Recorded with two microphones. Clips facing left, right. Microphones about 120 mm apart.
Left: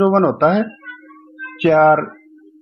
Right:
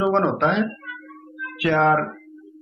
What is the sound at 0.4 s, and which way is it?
Speech, 55° left (ahead or behind).